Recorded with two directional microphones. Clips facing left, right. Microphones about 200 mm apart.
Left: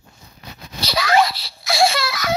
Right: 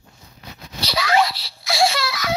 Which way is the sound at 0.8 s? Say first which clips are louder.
Left 2 dB; 45° left (ahead or behind).